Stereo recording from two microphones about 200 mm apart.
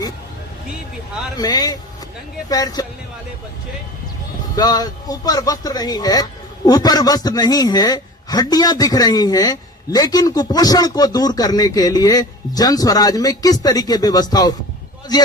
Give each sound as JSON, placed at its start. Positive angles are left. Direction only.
{"t": 1.4, "sound": "a man's voice", "side_deg": 20}
{"t": 4.5, "sound": "a man's voice", "side_deg": 20}